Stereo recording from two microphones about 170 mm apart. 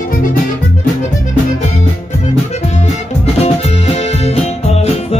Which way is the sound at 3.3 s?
40° left (ahead or behind).